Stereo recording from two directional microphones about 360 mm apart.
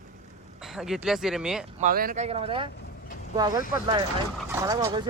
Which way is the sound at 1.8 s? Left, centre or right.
Right.